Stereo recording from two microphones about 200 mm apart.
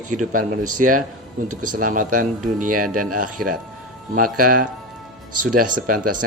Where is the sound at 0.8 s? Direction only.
45° right (ahead or behind).